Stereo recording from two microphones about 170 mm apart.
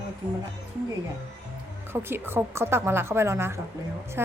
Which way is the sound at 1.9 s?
15° right (ahead or behind).